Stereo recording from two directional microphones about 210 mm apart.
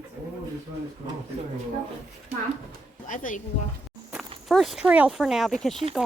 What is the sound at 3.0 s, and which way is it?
Speech, 40° left (ahead or behind).